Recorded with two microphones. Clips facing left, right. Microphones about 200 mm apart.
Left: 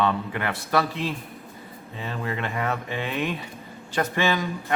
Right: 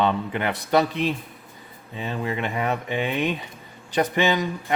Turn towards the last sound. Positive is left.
turn(degrees=-20)  # may be behind; listen again after turning